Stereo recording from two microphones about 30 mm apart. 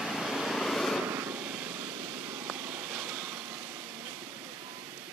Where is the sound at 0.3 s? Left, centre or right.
Centre.